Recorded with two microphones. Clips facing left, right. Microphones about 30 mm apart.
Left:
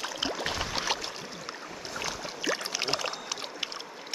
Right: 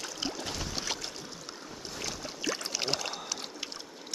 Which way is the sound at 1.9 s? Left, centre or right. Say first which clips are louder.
Left 4 dB; centre.